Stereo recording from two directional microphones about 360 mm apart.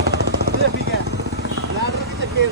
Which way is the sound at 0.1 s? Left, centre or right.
Right.